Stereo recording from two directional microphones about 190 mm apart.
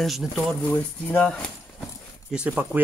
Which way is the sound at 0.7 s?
10° left (ahead or behind).